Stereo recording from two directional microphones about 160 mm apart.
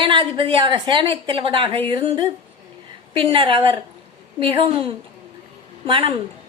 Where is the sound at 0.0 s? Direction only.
30° right (ahead or behind).